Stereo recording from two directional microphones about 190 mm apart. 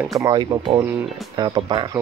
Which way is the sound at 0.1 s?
20° right (ahead or behind).